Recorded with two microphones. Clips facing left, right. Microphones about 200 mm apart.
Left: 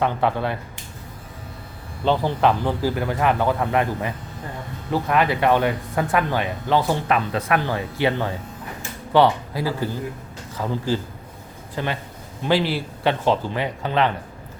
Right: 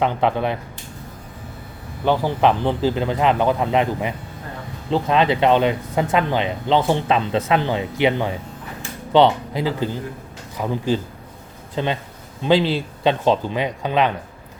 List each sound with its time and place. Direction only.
0.0 s speech: 20° right (ahead or behind)
2.0 s speech: 15° right (ahead or behind)